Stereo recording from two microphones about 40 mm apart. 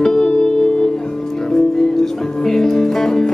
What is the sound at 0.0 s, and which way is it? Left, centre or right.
Music, centre.